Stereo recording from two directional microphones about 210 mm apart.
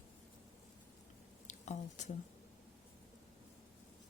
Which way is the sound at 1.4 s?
35° left (ahead or behind).